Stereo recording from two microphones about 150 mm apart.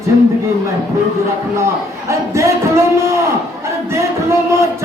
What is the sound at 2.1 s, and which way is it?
Speech, 20° right (ahead or behind).